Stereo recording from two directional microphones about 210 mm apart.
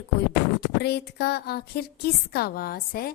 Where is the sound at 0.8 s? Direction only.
50° left (ahead or behind).